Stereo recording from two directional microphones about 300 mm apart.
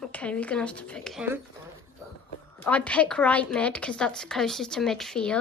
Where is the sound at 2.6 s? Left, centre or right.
Centre.